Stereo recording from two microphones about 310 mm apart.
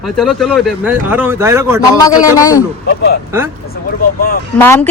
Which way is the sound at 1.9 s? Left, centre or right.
Centre.